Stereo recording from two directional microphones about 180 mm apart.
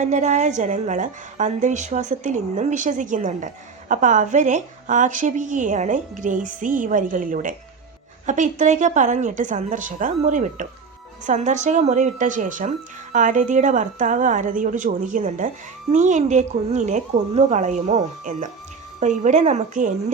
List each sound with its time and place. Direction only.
0.0 s a woman's voice: 40° right (ahead or behind)